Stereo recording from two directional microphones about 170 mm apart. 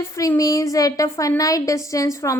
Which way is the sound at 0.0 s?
20° left (ahead or behind).